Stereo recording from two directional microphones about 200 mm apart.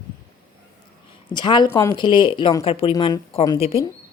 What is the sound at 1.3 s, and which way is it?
Speech, 25° left (ahead or behind).